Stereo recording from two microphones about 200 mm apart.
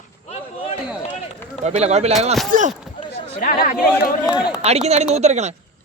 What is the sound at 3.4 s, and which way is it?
Speech, 45° left (ahead or behind).